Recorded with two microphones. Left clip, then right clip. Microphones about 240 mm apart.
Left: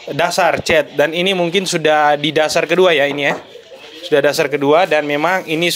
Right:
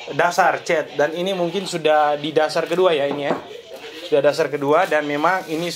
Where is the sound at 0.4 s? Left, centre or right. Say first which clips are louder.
Left 4 dB; left.